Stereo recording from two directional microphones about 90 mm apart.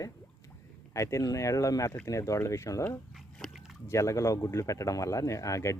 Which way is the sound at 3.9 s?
35° left (ahead or behind).